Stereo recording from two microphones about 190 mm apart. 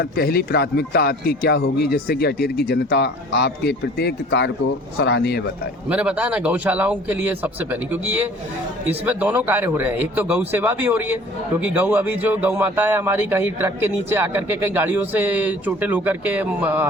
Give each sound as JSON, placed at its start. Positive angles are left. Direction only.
{"t": 0.0, "sound": "speech", "side_deg": 50}
{"t": 5.9, "sound": "speech", "side_deg": -5}